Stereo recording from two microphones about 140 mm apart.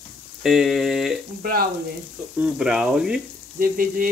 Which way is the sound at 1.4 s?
90° right.